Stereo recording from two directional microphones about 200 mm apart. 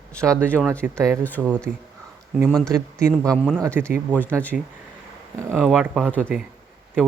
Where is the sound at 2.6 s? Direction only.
15° right (ahead or behind).